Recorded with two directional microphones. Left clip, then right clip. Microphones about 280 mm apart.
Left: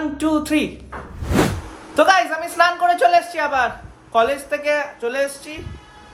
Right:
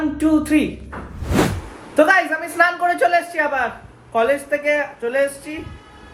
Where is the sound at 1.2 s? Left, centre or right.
Centre.